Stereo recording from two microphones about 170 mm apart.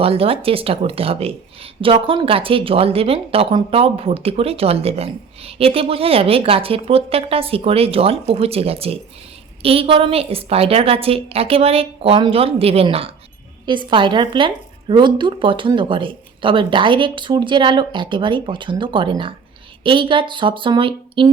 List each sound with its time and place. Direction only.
0.0 s speech: 35° right (ahead or behind)